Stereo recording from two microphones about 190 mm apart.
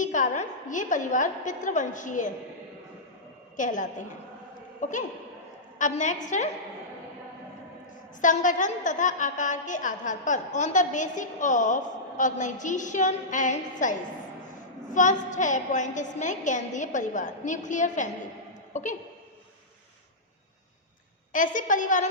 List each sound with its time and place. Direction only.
0.0 s a woman's voice: 40° left (ahead or behind)
3.6 s a woman's voice: 45° left (ahead or behind)
8.2 s a woman's voice: 40° left (ahead or behind)
21.3 s a woman's voice: 45° left (ahead or behind)